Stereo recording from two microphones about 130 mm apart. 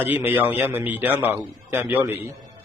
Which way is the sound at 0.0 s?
15° right (ahead or behind).